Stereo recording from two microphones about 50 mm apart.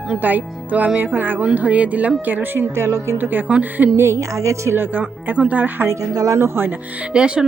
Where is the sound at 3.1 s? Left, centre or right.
Right.